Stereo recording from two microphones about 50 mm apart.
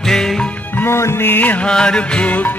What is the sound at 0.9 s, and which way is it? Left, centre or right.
Music, left.